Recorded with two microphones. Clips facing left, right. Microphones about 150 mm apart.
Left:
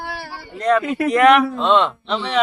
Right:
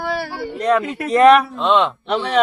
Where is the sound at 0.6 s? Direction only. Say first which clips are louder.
Left 1 dB; 15° right (ahead or behind).